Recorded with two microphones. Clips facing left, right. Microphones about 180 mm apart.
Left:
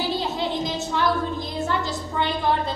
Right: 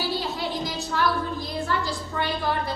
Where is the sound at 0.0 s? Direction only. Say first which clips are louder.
Left 3 dB; 20° left (ahead or behind).